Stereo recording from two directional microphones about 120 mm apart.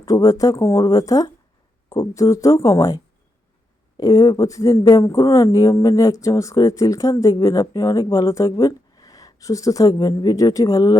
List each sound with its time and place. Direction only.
0.0 s speech: 25° left (ahead or behind)